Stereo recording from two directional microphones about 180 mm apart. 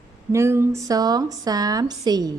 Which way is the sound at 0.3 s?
15° right (ahead or behind).